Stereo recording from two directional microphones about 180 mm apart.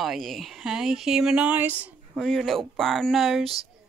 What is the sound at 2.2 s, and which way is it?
Speech, centre (ahead or behind).